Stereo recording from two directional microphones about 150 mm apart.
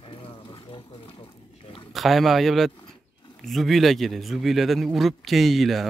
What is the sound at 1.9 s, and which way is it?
Speech, centre (ahead or behind).